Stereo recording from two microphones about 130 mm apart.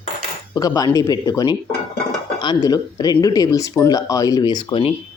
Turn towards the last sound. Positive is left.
turn(degrees=35)  # may be behind; listen again after turning